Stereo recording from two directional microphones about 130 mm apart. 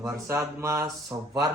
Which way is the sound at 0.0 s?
25° right (ahead or behind).